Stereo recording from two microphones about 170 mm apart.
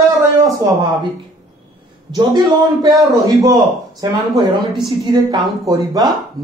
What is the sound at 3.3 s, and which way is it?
Speech, 20° right (ahead or behind).